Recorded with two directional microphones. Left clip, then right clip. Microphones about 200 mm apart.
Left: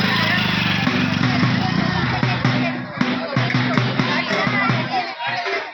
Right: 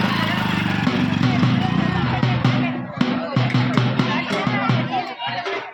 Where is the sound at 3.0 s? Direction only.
45° right (ahead or behind).